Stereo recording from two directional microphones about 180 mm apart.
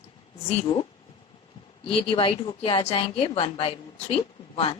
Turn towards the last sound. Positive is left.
turn(degrees=30)  # may be behind; listen again after turning